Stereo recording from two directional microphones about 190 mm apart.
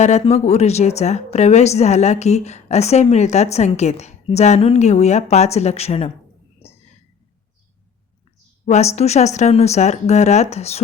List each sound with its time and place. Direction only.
0.0 s a woman's voice: 35° left (ahead or behind)
6.6 s whispering: 30° left (ahead or behind)
8.6 s a woman's voice: 35° left (ahead or behind)